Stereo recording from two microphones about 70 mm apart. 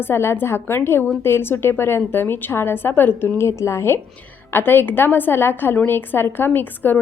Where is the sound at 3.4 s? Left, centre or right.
Left.